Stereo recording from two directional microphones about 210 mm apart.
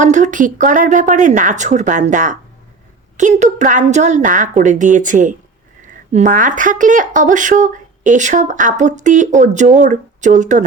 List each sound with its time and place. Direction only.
0.0 s speech: 35° right (ahead or behind)